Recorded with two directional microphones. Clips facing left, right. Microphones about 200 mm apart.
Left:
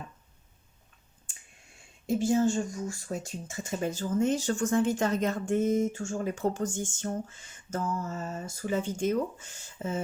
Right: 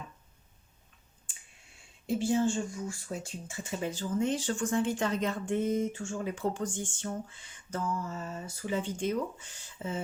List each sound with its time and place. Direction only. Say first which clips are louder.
2.0 s speech: left 3 dB; 45° left (ahead or behind)